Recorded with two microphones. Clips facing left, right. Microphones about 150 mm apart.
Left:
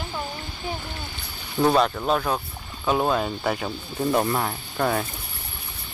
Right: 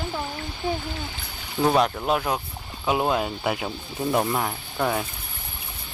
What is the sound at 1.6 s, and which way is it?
Speech, 10° right (ahead or behind).